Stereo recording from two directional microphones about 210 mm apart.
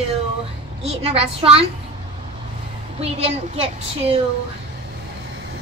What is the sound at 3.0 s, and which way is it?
A woman's voice, 30° right (ahead or behind).